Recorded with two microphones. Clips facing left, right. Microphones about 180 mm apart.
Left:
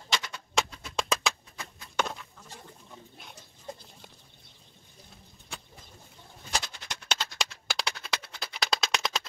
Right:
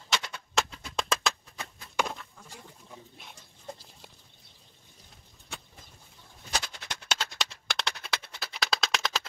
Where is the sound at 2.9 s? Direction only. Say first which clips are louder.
Right 2 dB; centre (ahead or behind).